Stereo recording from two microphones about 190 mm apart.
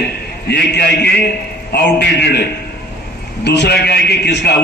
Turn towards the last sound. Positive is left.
turn(degrees=60)  # may be behind; listen again after turning